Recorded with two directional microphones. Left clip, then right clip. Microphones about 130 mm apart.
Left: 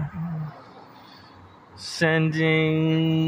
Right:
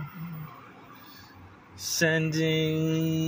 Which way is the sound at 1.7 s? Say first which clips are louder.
Left 3 dB; 30° left (ahead or behind).